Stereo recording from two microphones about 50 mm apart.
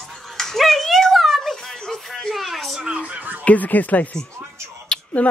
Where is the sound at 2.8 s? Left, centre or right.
Right.